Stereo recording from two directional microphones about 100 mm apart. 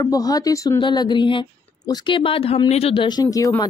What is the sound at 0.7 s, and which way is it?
A woman's voice, 50° left (ahead or behind).